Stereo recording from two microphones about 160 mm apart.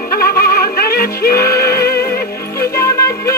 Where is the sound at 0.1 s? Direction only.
75° left (ahead or behind).